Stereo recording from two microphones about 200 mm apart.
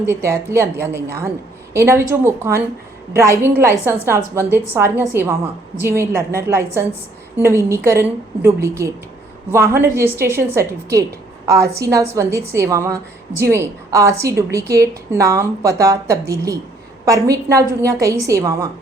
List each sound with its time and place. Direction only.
0.0 s a woman's voice: 15° right (ahead or behind)